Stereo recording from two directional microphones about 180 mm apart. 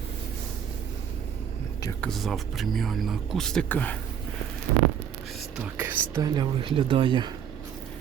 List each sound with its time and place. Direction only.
2.0 s speech: centre (ahead or behind)
5.5 s speech: 10° right (ahead or behind); by 7.3 s 25° right (ahead or behind)